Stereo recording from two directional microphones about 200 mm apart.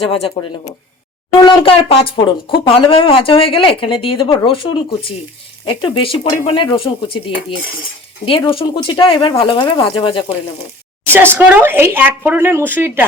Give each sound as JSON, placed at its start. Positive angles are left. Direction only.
{"t": 0.1, "sound": "speech", "side_deg": 25}
{"t": 11.0, "sound": "speech", "side_deg": -10}